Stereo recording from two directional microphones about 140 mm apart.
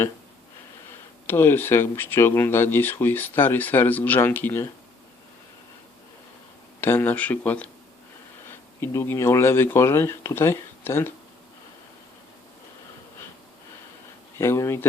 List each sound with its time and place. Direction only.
1.3 s speech: 15° left (ahead or behind)
6.8 s speech: 15° left (ahead or behind)
8.8 s speech: 15° left (ahead or behind)
14.3 s speech: 20° left (ahead or behind)